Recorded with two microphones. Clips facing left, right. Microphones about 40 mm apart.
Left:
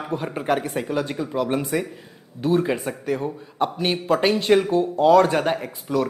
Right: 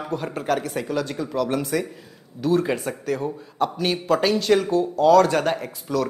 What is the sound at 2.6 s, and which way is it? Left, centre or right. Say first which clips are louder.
A man's voice: left 1 dB; centre.